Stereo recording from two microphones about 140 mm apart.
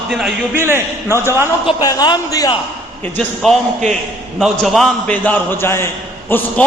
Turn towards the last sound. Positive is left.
turn(degrees=15)  # may be behind; listen again after turning